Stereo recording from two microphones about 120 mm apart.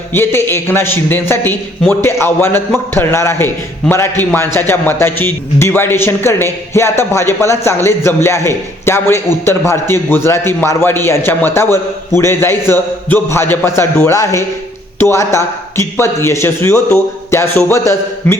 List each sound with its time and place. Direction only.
0.1 s a man's voice: 20° left (ahead or behind)